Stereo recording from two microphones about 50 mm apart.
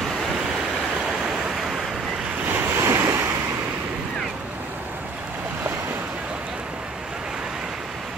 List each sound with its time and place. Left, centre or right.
2.4 s waves: right
2.9 s waves: right